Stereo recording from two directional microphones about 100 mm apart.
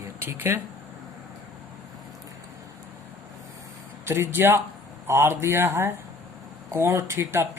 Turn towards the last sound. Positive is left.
turn(degrees=-25)  # may be behind; listen again after turning